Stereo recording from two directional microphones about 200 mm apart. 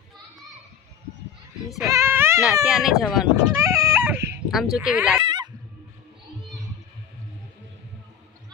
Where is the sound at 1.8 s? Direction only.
15° right (ahead or behind).